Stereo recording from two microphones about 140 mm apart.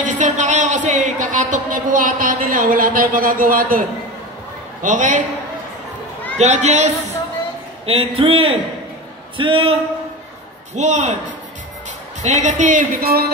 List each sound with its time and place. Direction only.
0.0 s speech: 65° right (ahead or behind); by 3.8 s 90° right
4.8 s speech: 65° right (ahead or behind)
6.3 s speech: 55° right (ahead or behind)
7.8 s a man's voice: 45° right (ahead or behind)
10.7 s speech: 55° right (ahead or behind)
12.2 s speech: 55° right (ahead or behind); by 13.2 s 80° right